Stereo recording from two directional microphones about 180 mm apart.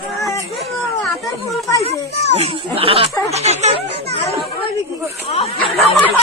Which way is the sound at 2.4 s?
30° right (ahead or behind).